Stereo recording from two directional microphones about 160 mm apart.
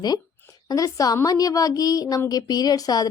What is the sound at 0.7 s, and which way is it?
A woman's voice, 20° left (ahead or behind).